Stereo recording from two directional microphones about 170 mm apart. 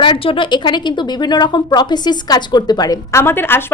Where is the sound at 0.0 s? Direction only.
30° left (ahead or behind).